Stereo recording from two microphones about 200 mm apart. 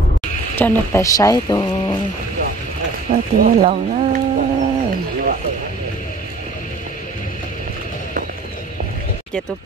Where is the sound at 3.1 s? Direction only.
45° right (ahead or behind).